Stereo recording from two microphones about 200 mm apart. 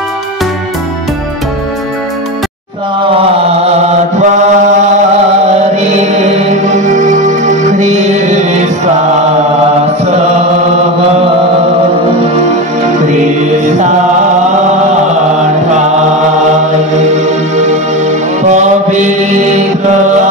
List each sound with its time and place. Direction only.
5.8 s mantra: 35° right (ahead or behind)
6.9 s music: 40° right (ahead or behind)
13.0 s music: 35° right (ahead or behind)
18.5 s mantra: 35° right (ahead or behind)